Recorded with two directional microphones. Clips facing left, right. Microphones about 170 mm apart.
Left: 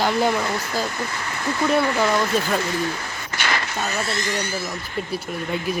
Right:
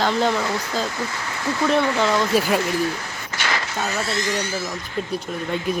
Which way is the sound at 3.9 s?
60° left (ahead or behind).